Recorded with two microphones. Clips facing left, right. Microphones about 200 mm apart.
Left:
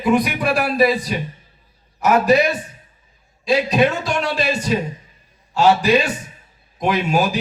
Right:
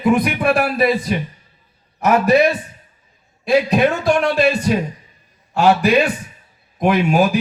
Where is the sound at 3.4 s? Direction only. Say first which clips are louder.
Right 2 dB; 55° right (ahead or behind).